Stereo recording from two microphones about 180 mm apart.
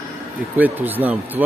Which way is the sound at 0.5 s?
10° right (ahead or behind).